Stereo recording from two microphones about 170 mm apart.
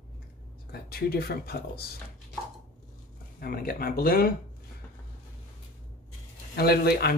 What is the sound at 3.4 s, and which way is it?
Speech, 60° left (ahead or behind).